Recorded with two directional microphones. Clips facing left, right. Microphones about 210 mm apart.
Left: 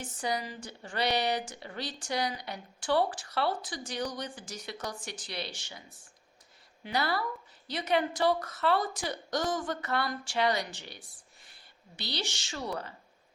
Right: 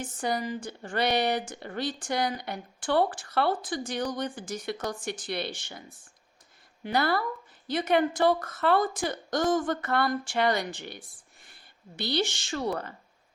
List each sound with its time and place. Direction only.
0.0 s speech: 50° right (ahead or behind)